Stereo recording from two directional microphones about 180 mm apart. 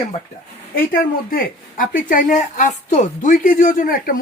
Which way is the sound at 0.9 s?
55° left (ahead or behind).